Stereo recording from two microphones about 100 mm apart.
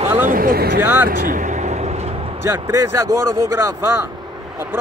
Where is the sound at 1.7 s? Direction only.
90° right.